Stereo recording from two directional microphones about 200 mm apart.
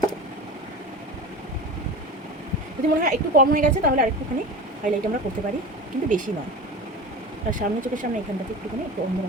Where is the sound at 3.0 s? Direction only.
45° right (ahead or behind).